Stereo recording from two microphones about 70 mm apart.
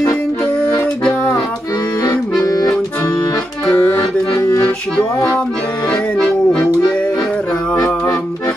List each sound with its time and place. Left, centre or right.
2.4 s accordion: left
4.3 s accordion: left
4.9 s music: centre
7.7 s music: left